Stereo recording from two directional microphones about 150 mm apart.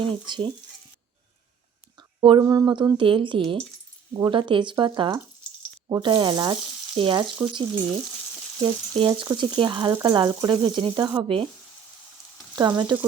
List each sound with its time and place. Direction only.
0.0 s speech: 35° right (ahead or behind)
2.0 s a sound: 35° right (ahead or behind)
2.4 s speech: 25° right (ahead or behind)
5.9 s frying: 30° right (ahead or behind)
9.0 s speech: 35° right (ahead or behind)
10.0 s frying: 30° right (ahead or behind)
12.5 s frying: 30° right (ahead or behind)